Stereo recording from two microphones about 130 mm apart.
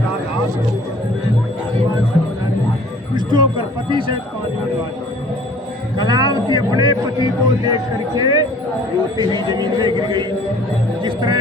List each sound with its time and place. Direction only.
3.2 s a sound: 35° right (ahead or behind)
3.8 s a man's voice: 40° right (ahead or behind)
6.0 s music: 30° right (ahead or behind)
6.5 s a man's voice: 30° right (ahead or behind)